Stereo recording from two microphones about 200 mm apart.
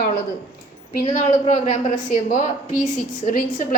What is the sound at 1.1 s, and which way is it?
A woman's voice, 40° left (ahead or behind).